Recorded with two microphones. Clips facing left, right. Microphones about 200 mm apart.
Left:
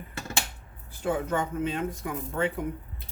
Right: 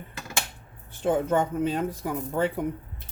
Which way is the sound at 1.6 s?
35° right (ahead or behind).